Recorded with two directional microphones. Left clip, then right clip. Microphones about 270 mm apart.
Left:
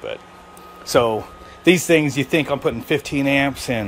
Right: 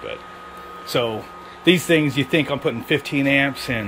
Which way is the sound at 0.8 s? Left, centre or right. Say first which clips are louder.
Left 5 dB; centre.